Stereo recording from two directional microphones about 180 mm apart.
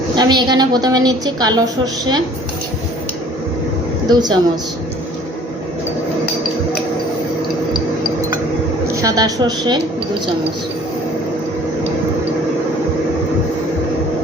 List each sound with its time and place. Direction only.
0.2 s a woman's voice: 25° right (ahead or behind)
4.1 s a woman's voice: 25° right (ahead or behind)
9.0 s a woman's voice: 20° right (ahead or behind)